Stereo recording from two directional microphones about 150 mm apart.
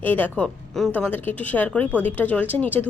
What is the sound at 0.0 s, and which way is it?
A woman's voice, 10° left (ahead or behind).